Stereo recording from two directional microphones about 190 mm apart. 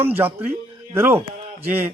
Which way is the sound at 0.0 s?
10° right (ahead or behind).